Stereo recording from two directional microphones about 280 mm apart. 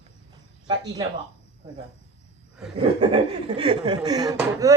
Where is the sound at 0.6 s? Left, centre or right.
Centre.